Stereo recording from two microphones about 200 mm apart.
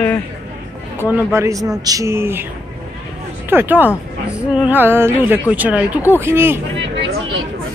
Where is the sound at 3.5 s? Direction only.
10° right (ahead or behind).